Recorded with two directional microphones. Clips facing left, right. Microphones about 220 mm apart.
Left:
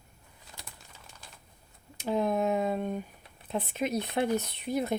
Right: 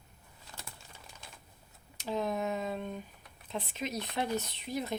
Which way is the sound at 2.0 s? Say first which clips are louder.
Left 5 dB; 55° left (ahead or behind).